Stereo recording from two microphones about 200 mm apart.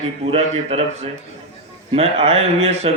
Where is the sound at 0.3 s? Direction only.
30° right (ahead or behind).